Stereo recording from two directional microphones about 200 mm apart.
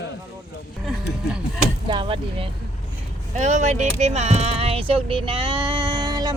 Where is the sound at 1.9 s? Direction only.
25° right (ahead or behind).